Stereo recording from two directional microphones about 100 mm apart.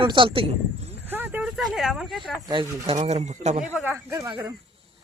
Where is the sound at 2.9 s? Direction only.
90° right.